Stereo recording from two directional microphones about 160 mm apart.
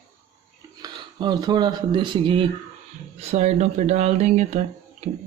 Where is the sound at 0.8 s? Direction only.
25° right (ahead or behind).